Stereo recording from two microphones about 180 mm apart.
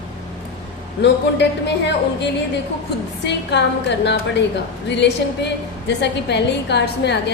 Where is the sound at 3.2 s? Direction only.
75° left (ahead or behind).